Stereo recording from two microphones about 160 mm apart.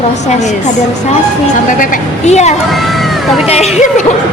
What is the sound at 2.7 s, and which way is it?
Vehicle, centre (ahead or behind).